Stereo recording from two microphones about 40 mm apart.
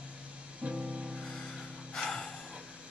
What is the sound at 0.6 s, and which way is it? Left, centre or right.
Music, right.